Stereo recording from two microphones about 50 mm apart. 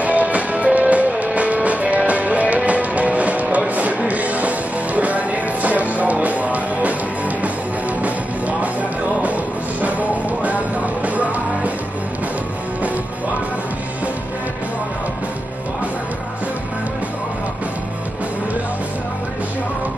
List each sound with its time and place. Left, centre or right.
0.0 s music: right
8.0 s music: right